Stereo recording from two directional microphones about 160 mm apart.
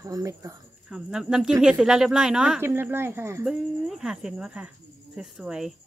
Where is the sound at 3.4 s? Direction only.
5° right (ahead or behind).